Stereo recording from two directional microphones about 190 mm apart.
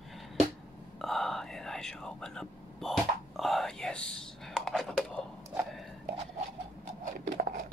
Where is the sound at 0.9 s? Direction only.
Centre (ahead or behind).